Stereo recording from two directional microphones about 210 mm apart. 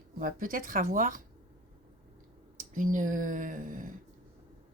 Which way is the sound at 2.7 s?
40° right (ahead or behind).